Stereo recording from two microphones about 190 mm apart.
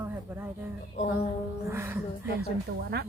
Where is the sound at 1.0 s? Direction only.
35° left (ahead or behind).